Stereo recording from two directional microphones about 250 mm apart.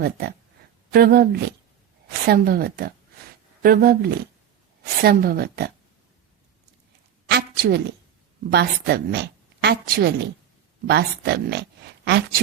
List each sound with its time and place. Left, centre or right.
0.0 s a woman's voice: right
7.3 s a sound: right
8.4 s a woman's voice: right